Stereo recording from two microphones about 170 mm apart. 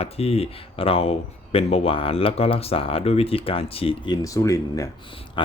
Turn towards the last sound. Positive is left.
turn(degrees=30)  # may be behind; listen again after turning